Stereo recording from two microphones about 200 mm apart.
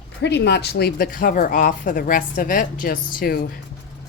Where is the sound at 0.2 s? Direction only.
60° left (ahead or behind).